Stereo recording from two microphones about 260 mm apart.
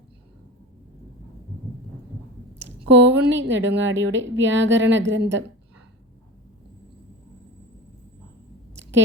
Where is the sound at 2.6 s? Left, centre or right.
Right.